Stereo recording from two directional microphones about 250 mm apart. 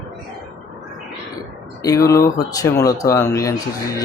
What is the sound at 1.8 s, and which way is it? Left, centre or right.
Speech, centre.